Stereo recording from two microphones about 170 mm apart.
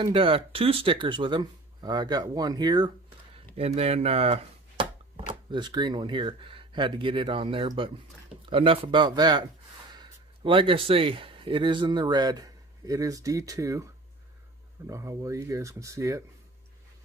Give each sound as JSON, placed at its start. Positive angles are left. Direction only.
{"t": 0.0, "sound": "speech", "side_deg": -30}
{"t": 3.5, "sound": "speech", "side_deg": -35}
{"t": 14.9, "sound": "speech", "side_deg": -15}